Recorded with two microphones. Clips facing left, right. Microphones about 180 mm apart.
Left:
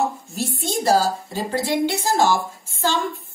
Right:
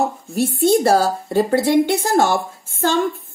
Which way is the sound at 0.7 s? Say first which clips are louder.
Right 4 dB; 60° right (ahead or behind).